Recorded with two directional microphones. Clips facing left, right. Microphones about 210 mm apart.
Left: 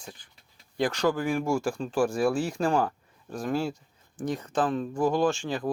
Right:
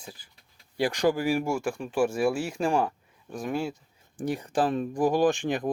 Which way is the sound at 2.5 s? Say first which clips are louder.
Even; 25° right (ahead or behind).